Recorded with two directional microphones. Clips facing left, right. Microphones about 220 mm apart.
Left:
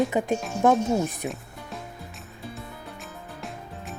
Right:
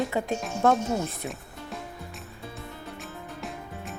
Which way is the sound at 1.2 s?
15° left (ahead or behind).